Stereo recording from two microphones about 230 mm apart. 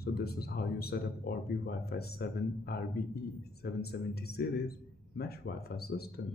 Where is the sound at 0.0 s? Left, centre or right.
Left.